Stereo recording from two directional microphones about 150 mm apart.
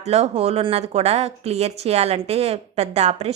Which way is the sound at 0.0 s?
45° right (ahead or behind).